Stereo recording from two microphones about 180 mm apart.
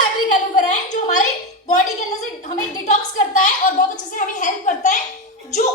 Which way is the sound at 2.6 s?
40° left (ahead or behind).